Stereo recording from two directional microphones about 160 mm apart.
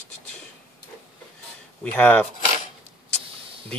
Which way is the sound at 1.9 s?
10° left (ahead or behind).